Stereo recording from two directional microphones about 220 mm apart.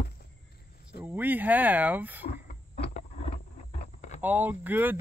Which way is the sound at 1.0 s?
10° right (ahead or behind).